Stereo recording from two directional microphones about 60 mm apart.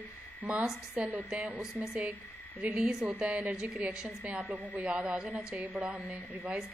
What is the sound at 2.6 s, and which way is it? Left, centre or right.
A woman's voice, right.